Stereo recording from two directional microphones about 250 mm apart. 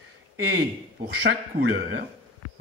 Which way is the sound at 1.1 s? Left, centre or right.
Right.